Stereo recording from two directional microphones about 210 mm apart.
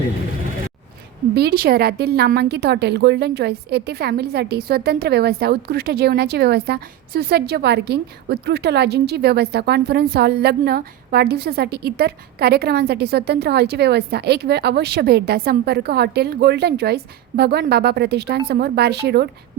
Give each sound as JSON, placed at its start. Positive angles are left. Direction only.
{"t": 1.4, "sound": "a woman's voice", "side_deg": -45}